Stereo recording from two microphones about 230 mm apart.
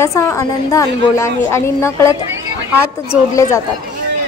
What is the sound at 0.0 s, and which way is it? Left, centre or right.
A woman's voice, centre.